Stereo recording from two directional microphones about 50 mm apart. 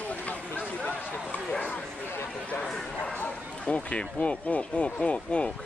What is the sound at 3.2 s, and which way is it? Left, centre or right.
Speech, left.